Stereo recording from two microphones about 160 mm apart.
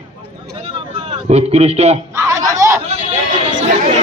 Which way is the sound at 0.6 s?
45° right (ahead or behind).